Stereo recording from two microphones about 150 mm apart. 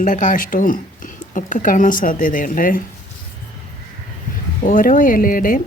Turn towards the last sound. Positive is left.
turn(degrees=65)  # may be behind; listen again after turning